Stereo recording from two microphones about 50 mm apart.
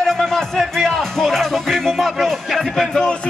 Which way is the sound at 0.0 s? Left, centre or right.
Centre.